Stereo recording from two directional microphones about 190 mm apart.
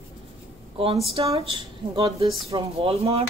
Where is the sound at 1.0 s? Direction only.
30° right (ahead or behind).